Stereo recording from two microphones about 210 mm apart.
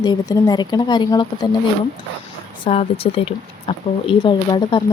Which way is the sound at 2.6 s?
25° left (ahead or behind).